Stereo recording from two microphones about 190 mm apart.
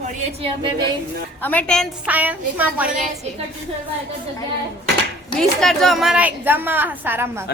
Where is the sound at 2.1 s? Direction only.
10° right (ahead or behind).